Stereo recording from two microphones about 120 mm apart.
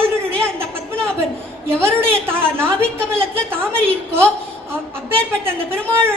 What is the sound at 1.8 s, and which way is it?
Speech, 20° right (ahead or behind).